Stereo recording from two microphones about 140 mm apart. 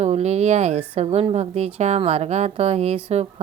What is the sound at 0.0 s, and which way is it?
A woman's voice, 50° right (ahead or behind).